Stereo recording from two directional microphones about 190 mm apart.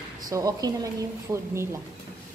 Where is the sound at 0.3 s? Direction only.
20° right (ahead or behind).